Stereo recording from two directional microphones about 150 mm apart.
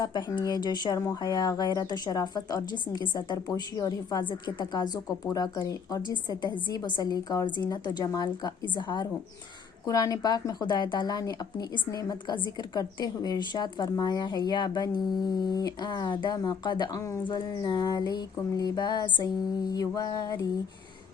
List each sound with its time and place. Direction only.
0.0 s a woman's voice: 25° left (ahead or behind)